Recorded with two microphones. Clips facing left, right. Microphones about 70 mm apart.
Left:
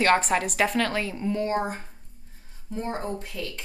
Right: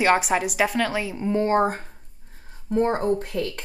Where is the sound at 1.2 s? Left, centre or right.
Right.